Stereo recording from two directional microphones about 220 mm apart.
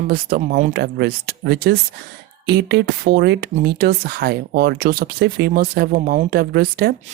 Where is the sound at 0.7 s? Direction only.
50° right (ahead or behind).